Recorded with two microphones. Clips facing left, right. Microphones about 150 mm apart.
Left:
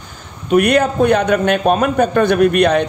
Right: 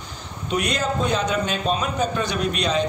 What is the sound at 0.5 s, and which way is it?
A man's voice, 60° left (ahead or behind).